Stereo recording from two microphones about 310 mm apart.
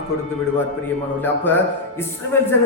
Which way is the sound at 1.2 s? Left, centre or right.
Centre.